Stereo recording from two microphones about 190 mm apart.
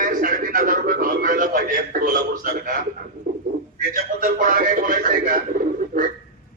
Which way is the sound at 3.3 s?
50° right (ahead or behind).